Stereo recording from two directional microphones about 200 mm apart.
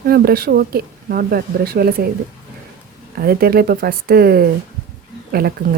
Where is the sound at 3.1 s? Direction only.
50° right (ahead or behind).